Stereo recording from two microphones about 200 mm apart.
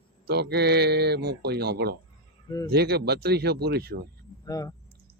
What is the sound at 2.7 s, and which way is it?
Speech, 55° right (ahead or behind).